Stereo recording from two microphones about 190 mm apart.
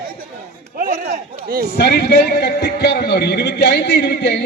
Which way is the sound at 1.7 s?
55° left (ahead or behind).